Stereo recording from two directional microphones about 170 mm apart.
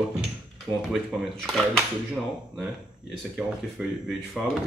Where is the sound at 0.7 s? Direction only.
15° right (ahead or behind).